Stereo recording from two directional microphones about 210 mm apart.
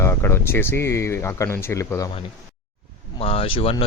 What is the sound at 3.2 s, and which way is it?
Speech, 25° left (ahead or behind).